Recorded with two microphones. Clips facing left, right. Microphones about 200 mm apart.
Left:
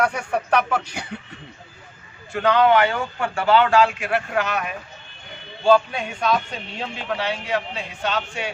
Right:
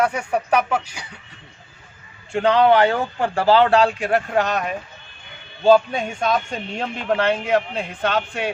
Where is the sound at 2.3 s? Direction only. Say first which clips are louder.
Right 2 dB; 30° right (ahead or behind).